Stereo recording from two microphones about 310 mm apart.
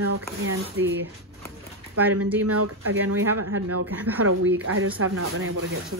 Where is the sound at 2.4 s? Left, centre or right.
Right.